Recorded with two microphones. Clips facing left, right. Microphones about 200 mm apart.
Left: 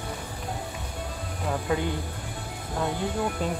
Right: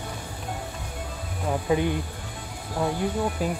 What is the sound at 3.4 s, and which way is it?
Speech, 5° right (ahead or behind).